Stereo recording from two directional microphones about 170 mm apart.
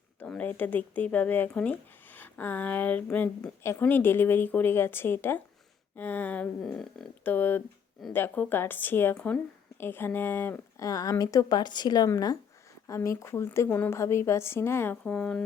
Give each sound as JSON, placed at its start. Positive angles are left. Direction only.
{"t": 0.2, "sound": "speech", "side_deg": 10}